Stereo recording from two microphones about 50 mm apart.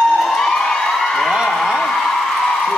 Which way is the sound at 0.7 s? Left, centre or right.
Centre.